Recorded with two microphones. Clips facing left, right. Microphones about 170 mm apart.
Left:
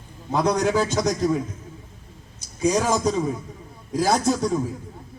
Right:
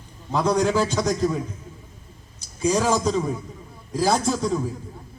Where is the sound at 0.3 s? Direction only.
15° left (ahead or behind).